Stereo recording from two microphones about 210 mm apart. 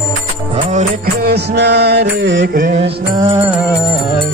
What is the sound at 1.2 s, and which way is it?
Music, 50° right (ahead or behind).